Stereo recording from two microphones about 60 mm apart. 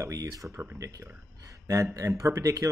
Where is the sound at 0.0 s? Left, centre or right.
Right.